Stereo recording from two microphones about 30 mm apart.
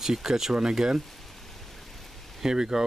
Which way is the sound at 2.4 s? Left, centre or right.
Right.